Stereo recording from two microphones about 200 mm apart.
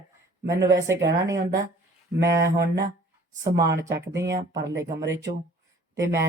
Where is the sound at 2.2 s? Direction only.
15° right (ahead or behind).